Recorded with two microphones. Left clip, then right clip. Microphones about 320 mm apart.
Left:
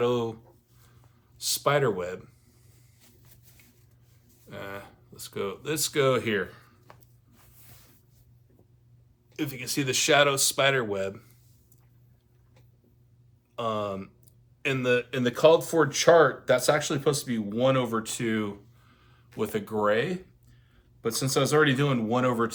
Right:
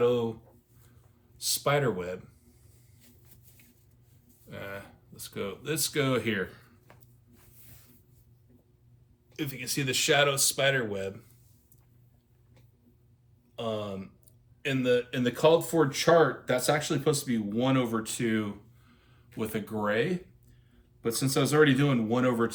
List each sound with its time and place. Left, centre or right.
0.0 s speech: centre
1.4 s speech: centre
4.4 s speech: centre
7.3 s a sound: centre
9.3 s speech: centre
13.6 s speech: left